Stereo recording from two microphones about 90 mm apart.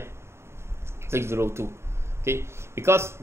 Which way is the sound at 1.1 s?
30° right (ahead or behind).